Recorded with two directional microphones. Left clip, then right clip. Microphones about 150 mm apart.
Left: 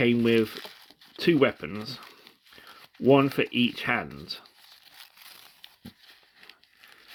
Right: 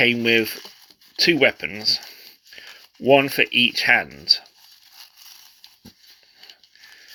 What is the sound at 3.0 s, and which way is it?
Speech, 35° left (ahead or behind).